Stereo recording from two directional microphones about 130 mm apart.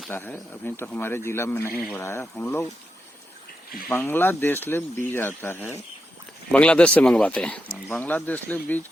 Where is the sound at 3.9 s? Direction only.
15° left (ahead or behind).